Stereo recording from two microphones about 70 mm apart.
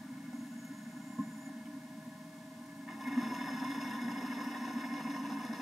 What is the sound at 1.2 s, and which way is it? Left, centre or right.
Train, centre.